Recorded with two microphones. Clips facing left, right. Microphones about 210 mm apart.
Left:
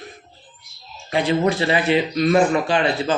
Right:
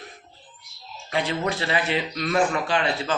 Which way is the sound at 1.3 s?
20° left (ahead or behind).